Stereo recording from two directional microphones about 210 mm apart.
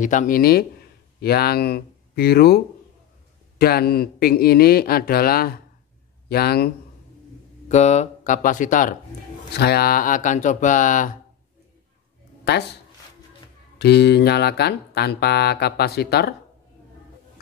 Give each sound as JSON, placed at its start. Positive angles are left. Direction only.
{"t": 0.0, "sound": "speech", "side_deg": 35}
{"t": 7.6, "sound": "speech", "side_deg": 35}
{"t": 9.5, "sound": "speech", "side_deg": 50}
{"t": 13.7, "sound": "speech", "side_deg": 50}